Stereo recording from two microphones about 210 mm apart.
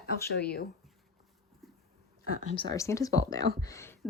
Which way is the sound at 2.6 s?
15° left (ahead or behind).